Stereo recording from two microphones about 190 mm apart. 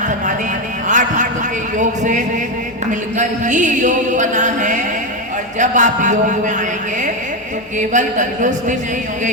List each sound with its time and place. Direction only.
0.9 s a sound: 40° right (ahead or behind)
1.8 s music: 40° right (ahead or behind)
7.8 s music: 40° right (ahead or behind)